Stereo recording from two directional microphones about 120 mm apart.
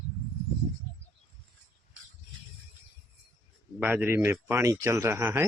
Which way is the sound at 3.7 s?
15° right (ahead or behind).